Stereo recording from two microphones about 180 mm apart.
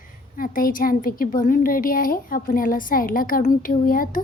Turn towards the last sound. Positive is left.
turn(degrees=50)  # may be behind; listen again after turning